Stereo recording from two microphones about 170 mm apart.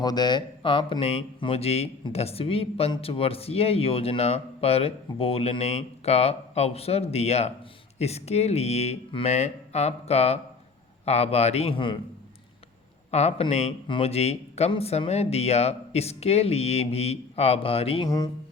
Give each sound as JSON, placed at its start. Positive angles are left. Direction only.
{"t": 0.0, "sound": "speech", "side_deg": 25}
{"t": 13.1, "sound": "speech", "side_deg": 40}